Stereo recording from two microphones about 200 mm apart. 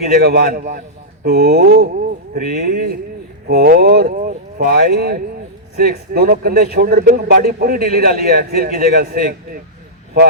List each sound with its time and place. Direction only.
0.2 s a man's voice: 50° right (ahead or behind)